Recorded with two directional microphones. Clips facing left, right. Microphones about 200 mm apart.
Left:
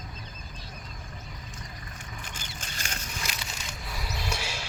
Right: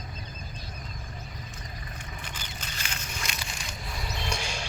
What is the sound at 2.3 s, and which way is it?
Vehicle, 45° left (ahead or behind).